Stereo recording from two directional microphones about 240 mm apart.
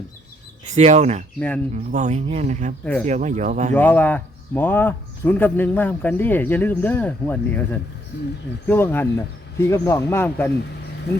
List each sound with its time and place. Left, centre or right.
0.6 s speech: right
1.4 s speech: centre
1.7 s speech: right
3.8 s speech: centre